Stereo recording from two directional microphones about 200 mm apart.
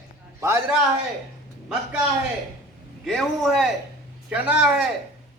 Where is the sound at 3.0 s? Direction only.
Centre (ahead or behind).